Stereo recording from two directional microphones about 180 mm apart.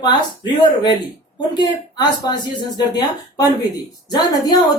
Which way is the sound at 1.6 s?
25° left (ahead or behind).